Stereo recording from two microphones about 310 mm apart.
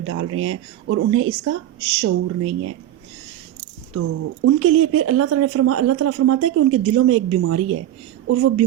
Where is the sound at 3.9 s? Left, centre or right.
Right.